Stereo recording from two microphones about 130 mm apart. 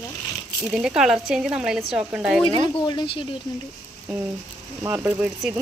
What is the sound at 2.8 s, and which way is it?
Speech, 35° left (ahead or behind).